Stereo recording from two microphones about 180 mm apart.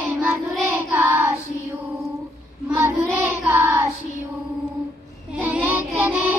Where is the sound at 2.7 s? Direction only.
10° right (ahead or behind).